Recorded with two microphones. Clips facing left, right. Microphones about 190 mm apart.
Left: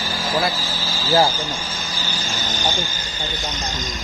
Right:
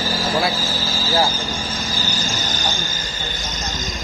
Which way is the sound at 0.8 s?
45° right (ahead or behind).